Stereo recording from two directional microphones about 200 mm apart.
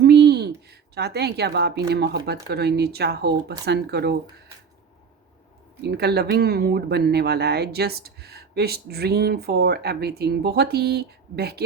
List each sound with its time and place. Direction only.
0.0 s a sound: 55° right (ahead or behind)
1.9 s speech: 55° right (ahead or behind)
5.8 s speech: 55° right (ahead or behind)